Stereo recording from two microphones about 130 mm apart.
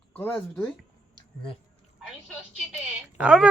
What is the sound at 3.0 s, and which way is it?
Speech, 10° right (ahead or behind).